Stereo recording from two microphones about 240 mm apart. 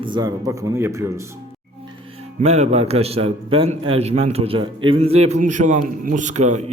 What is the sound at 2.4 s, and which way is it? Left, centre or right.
A man's voice, right.